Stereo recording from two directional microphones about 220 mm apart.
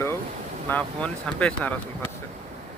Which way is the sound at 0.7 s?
5° left (ahead or behind).